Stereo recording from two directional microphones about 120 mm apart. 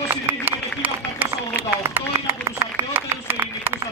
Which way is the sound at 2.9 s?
20° right (ahead or behind).